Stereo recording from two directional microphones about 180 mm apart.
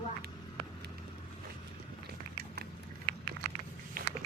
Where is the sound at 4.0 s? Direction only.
50° right (ahead or behind).